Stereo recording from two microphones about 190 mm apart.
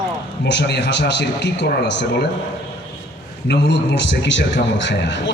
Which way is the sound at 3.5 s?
65° left (ahead or behind).